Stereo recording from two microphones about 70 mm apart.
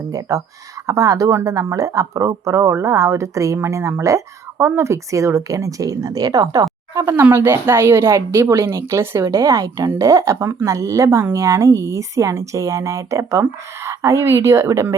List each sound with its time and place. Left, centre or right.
0.1 s speech: right
6.9 s a woman's voice: right
9.6 s a woman's voice: right
10.0 s speech: right